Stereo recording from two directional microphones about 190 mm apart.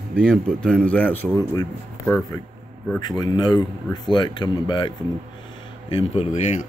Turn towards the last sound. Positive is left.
turn(degrees=35)  # may be behind; listen again after turning